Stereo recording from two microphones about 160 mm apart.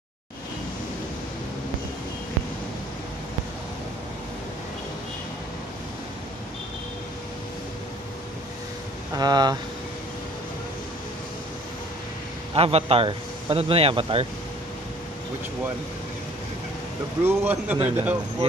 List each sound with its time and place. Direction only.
9.1 s speech: 25° right (ahead or behind)
12.5 s speech: 35° right (ahead or behind)
17.2 s speech: 15° right (ahead or behind)